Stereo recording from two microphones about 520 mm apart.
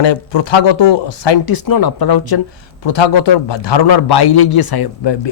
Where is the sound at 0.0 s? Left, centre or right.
Left.